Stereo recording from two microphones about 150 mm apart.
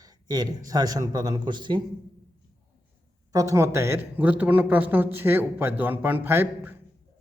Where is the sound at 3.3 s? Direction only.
20° right (ahead or behind).